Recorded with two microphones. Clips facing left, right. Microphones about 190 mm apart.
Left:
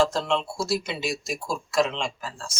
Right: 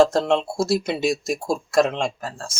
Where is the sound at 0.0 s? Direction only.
50° right (ahead or behind).